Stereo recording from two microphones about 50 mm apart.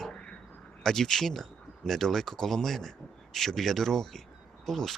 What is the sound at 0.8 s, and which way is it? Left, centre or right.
Speech, centre.